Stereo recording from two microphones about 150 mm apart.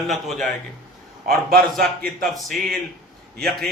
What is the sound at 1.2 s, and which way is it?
Speech, 90° right.